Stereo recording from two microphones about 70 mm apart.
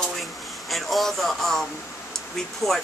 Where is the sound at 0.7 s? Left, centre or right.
Centre.